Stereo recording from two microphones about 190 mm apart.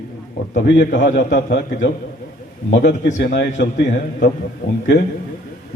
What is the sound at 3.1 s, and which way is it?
Speech, 45° left (ahead or behind).